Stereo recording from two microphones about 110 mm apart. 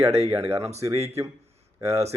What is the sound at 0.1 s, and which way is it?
Speech, 70° right (ahead or behind).